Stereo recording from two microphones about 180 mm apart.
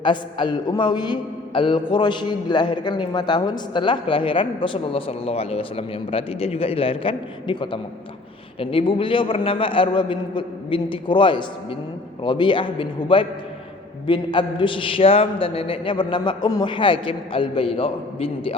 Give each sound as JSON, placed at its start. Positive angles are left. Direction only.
{"t": 0.0, "sound": "a man's voice", "side_deg": 25}